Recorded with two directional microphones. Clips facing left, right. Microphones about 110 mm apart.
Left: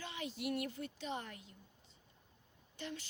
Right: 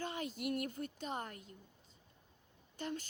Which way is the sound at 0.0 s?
45° right (ahead or behind).